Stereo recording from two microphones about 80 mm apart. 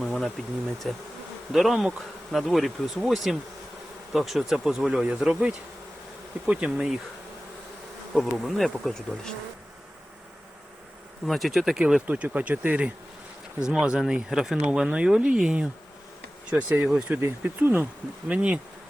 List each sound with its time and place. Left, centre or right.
0.0 s a sound: centre
0.9 s bee: centre
4.9 s speech: centre
5.2 s bee: centre
6.4 s speech: centre
8.1 s bee: centre
11.3 s bee: centre
12.0 s speech: centre
16.5 s speech: centre
16.8 s speech: centre
17.4 s speech: right